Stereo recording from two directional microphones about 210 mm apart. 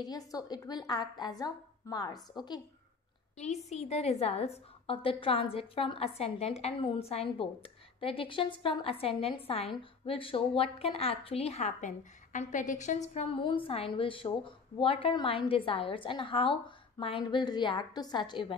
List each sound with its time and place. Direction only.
0.0 s a woman's voice: 20° left (ahead or behind)
3.7 s a woman's voice: 30° left (ahead or behind)